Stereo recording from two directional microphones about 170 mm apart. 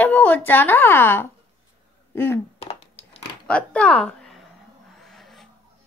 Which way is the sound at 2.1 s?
15° left (ahead or behind).